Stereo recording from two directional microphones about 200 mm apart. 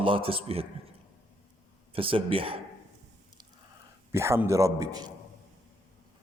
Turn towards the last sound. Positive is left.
turn(degrees=-20)  # may be behind; listen again after turning